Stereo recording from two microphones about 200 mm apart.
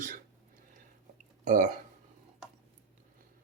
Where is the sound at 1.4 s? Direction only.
40° right (ahead or behind).